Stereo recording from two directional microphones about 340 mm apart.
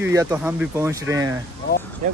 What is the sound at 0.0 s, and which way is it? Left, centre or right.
Speech, centre.